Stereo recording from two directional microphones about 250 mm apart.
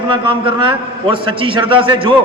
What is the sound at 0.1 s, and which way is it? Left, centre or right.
A man's voice, right.